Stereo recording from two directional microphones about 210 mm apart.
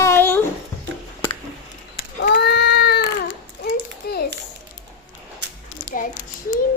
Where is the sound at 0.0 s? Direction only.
10° left (ahead or behind).